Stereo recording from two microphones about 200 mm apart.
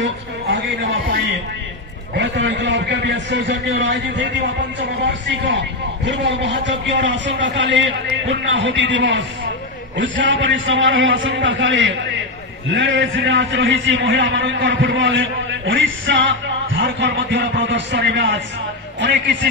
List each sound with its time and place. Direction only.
2.1 s a man's voice: 60° right (ahead or behind)